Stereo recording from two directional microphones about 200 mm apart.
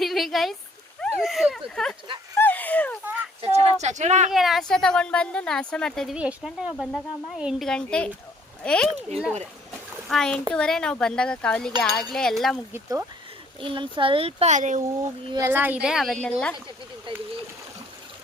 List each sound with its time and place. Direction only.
0.0 s a sound: centre (ahead or behind)
3.4 s a sound: 30° right (ahead or behind)
4.3 s a woman's voice: centre (ahead or behind)
12.7 s speech: 10° right (ahead or behind)
13.6 s speech: 25° right (ahead or behind)
15.3 s speech: 15° right (ahead or behind)